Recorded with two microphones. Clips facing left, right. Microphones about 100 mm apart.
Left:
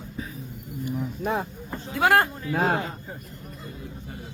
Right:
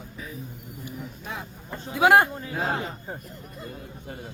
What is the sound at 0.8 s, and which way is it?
Cricket, 45° left (ahead or behind).